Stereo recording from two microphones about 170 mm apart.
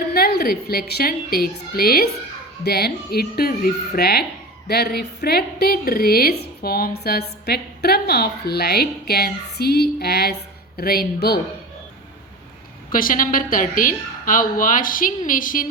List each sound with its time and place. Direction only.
0.1 s a woman's voice: 65° left (ahead or behind)
12.9 s a woman's voice: 55° left (ahead or behind)